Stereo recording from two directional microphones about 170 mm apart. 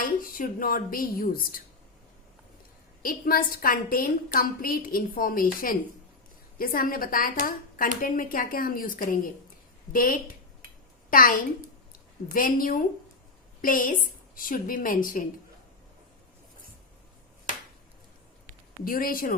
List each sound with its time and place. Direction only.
0.0 s a woman's voice: 55° left (ahead or behind)
3.0 s a woman's voice: 55° left (ahead or behind)
18.9 s a woman's voice: 55° left (ahead or behind)